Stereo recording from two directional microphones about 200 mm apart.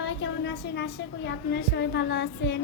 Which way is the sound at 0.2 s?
60° left (ahead or behind).